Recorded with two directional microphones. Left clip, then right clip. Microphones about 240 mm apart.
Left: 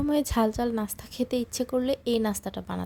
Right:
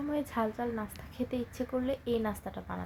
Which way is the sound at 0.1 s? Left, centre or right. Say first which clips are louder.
Left 7 dB; left.